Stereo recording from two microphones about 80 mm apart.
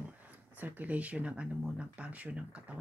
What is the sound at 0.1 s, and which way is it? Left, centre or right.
Speech, right.